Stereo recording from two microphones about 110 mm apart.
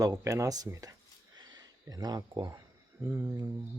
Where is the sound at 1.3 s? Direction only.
40° right (ahead or behind).